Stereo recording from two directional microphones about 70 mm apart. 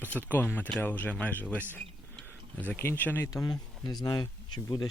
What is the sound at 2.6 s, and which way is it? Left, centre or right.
Speech, left.